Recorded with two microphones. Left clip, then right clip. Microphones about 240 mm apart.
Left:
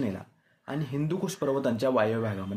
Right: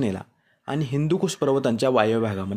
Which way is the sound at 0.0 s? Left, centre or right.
Right.